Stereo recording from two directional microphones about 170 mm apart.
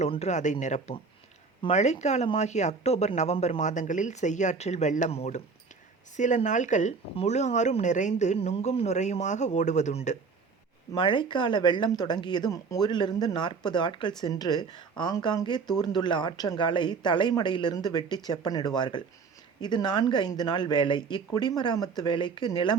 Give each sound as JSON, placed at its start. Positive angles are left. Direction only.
{"t": 0.0, "sound": "speech", "side_deg": 40}
{"t": 10.9, "sound": "speech", "side_deg": 30}